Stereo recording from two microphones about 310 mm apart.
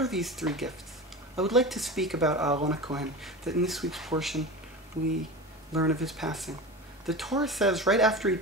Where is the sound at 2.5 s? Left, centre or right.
Right.